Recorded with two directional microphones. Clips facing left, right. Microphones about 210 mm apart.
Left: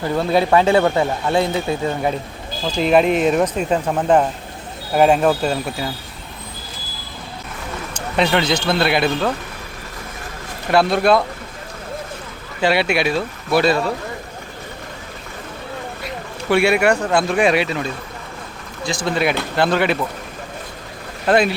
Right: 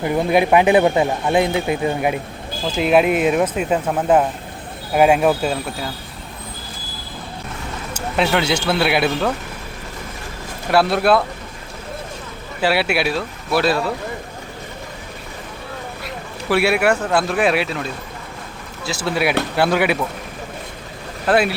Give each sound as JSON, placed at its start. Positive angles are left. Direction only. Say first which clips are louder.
{"t": 0.0, "sound": "speech", "louder": "right 1 dB", "side_deg": -15}
{"t": 2.6, "sound": "speech", "louder": "even", "side_deg": -5}
{"t": 7.9, "sound": "speech", "louder": "left 1 dB", "side_deg": -5}
{"t": 10.7, "sound": "speech", "louder": "left 1 dB", "side_deg": -5}
{"t": 12.6, "sound": "speech", "louder": "left 1 dB", "side_deg": -5}
{"t": 16.0, "sound": "speech", "louder": "left 2 dB", "side_deg": 0}
{"t": 21.2, "sound": "speech", "louder": "left 1 dB", "side_deg": -5}